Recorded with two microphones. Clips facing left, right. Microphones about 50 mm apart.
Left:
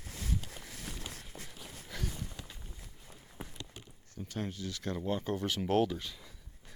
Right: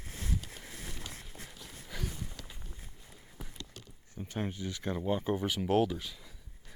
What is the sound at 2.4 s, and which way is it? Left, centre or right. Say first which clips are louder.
Walk: even; centre.